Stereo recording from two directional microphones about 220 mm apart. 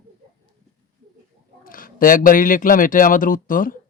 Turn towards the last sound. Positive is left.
turn(degrees=40)  # may be behind; listen again after turning